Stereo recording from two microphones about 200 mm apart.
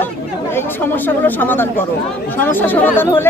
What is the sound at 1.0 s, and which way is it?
Speech, 10° left (ahead or behind).